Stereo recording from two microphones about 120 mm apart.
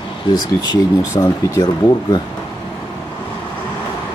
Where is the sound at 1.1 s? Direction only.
30° left (ahead or behind).